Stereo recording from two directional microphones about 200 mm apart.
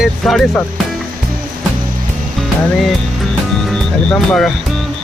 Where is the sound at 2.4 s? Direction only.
Centre (ahead or behind).